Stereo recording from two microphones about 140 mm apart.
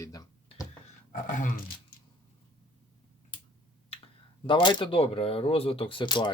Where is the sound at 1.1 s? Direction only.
70° left (ahead or behind).